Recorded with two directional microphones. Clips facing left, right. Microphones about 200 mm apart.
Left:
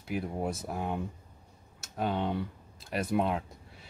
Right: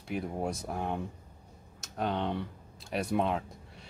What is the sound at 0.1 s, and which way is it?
Speech, 5° left (ahead or behind).